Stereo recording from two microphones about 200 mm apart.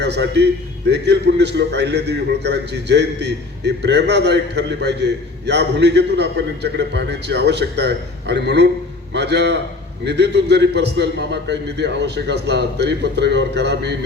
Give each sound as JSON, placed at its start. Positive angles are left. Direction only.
{"t": 0.0, "sound": "a man's voice", "side_deg": -60}